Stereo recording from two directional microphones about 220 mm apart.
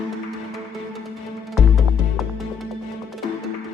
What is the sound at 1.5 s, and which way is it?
Music, centre (ahead or behind).